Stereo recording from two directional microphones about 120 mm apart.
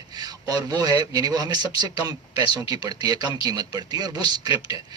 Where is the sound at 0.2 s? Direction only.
35° right (ahead or behind).